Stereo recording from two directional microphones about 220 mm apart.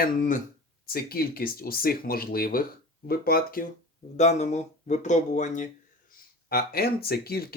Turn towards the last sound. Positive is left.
turn(degrees=45)  # may be behind; listen again after turning